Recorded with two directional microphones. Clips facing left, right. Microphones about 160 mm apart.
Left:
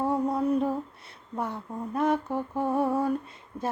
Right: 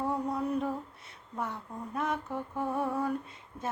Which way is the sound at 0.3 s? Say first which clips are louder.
Left 6 dB; 35° left (ahead or behind).